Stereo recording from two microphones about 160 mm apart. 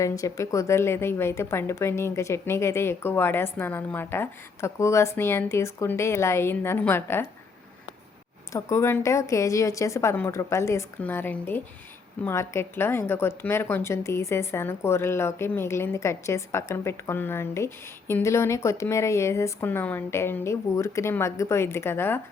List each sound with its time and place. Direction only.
0.0 s a woman's voice: 20° left (ahead or behind)
8.5 s a woman's voice: 15° left (ahead or behind)